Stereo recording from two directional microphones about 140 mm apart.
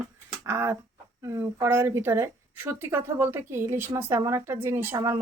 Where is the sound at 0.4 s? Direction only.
20° right (ahead or behind).